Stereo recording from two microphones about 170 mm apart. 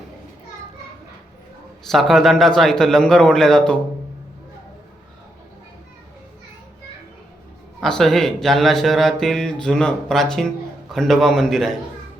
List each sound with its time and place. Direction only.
1.9 s speech: centre (ahead or behind)
7.8 s speech: centre (ahead or behind)